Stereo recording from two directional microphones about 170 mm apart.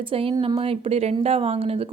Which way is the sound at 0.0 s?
30° right (ahead or behind).